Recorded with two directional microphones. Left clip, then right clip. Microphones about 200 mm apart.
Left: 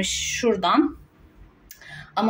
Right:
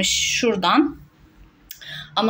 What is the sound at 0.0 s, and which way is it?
Speech, 5° right (ahead or behind).